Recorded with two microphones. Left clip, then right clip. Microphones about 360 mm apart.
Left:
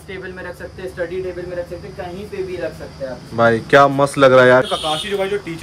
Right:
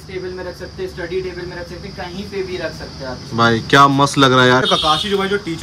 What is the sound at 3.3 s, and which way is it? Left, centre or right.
Speech, centre.